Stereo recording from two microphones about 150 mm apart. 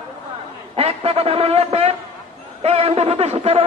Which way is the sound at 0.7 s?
40° right (ahead or behind).